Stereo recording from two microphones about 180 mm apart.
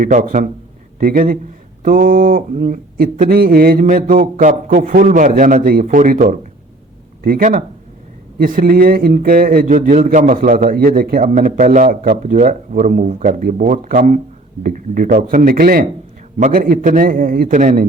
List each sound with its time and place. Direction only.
0.0 s a man's voice: 50° right (ahead or behind)